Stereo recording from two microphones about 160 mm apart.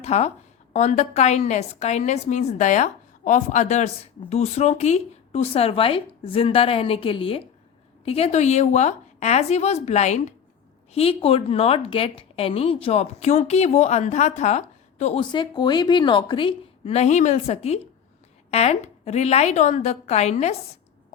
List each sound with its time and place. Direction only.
0.0 s a woman's voice: 45° left (ahead or behind)
15.2 s a woman's voice: 30° left (ahead or behind); by 20.6 s 45° left (ahead or behind)